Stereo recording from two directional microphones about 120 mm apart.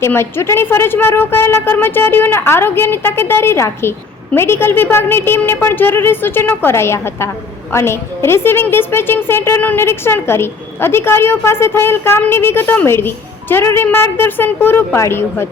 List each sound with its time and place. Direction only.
0.0 s a woman's voice: 20° left (ahead or behind)